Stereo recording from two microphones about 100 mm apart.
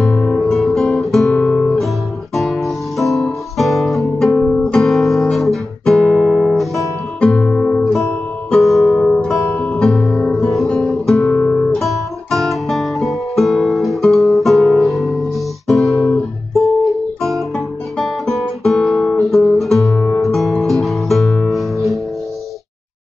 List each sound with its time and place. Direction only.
0.0 s guitar: 5° left (ahead or behind)
1.4 s guitar: 10° left (ahead or behind)
2.3 s music: centre (ahead or behind)
7.3 s music: 10° left (ahead or behind)
10.7 s guitar: 5° left (ahead or behind)
11.2 s guitar: 25° left (ahead or behind)
11.7 s guitar: centre (ahead or behind)
15.6 s music: centre (ahead or behind)
17.9 s guitar: 5° left (ahead or behind)
20.2 s music: centre (ahead or behind)